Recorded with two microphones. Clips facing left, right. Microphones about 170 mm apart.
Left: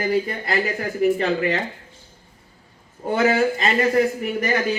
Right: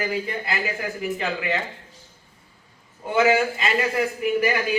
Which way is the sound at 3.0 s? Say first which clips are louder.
Left 1 dB; 40° left (ahead or behind).